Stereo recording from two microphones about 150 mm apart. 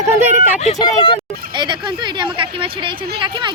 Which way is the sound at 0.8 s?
30° left (ahead or behind).